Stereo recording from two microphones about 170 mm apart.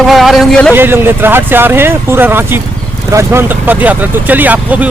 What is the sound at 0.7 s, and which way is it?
Speech, 15° right (ahead or behind).